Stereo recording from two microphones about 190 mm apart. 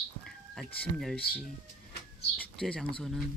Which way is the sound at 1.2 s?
55° left (ahead or behind).